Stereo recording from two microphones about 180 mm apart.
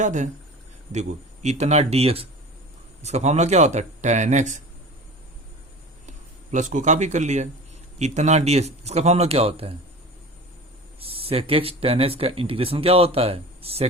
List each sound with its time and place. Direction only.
0.0 s speech: 45° right (ahead or behind)
6.5 s speech: 45° right (ahead or behind)
11.0 s speech: 30° right (ahead or behind)